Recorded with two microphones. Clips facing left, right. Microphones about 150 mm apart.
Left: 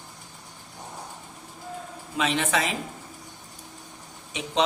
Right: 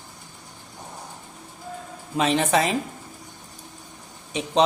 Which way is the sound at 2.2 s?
40° right (ahead or behind).